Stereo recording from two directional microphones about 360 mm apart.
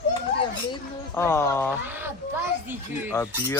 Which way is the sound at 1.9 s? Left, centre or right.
Centre.